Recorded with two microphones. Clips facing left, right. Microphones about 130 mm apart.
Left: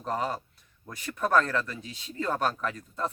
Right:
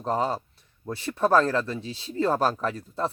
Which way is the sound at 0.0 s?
25° right (ahead or behind).